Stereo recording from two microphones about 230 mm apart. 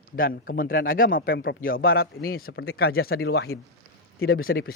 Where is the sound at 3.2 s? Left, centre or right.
Left.